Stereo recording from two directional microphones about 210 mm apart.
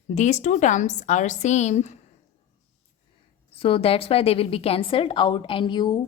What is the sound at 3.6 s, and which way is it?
A woman's voice, 25° left (ahead or behind).